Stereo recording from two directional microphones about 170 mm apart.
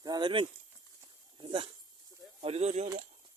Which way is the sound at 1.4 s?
30° right (ahead or behind).